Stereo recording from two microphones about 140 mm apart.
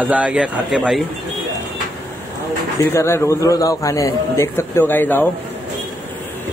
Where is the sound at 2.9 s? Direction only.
20° left (ahead or behind).